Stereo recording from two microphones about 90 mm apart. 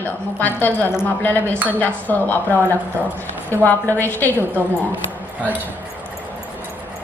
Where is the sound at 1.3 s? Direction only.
25° right (ahead or behind).